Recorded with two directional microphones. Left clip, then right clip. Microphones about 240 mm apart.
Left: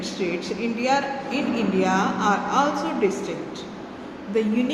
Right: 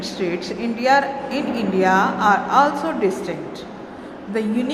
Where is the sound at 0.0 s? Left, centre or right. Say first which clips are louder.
Right 3 dB; centre.